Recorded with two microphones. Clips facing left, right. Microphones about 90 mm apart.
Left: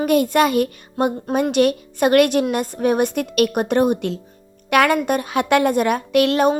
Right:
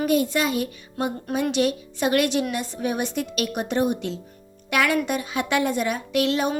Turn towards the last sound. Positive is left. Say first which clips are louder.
# left 7 dB
turn(degrees=55)  # may be behind; listen again after turning